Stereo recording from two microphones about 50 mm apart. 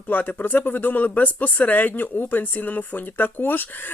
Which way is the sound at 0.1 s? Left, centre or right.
Left.